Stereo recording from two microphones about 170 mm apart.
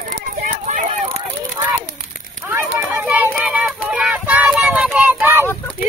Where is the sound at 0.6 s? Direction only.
45° right (ahead or behind).